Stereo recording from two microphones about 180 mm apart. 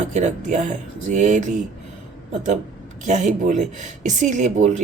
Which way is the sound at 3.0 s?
40° right (ahead or behind).